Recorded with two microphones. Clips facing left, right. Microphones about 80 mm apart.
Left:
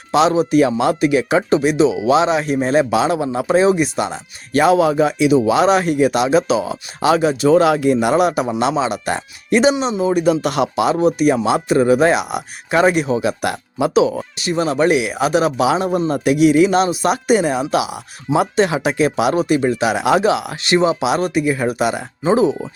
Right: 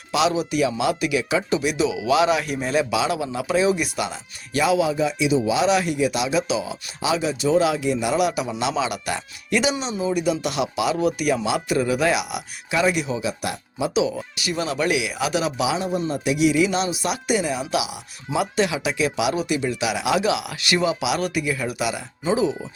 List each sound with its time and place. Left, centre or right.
0.1 s speech: left
14.4 s speech: left